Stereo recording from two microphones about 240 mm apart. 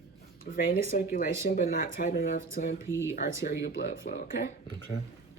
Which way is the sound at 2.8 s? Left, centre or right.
Centre.